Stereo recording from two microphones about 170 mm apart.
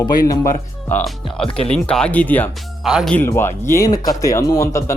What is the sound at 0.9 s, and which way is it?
Speech, 5° left (ahead or behind).